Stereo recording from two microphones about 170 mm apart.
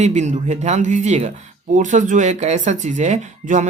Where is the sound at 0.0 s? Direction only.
45° right (ahead or behind).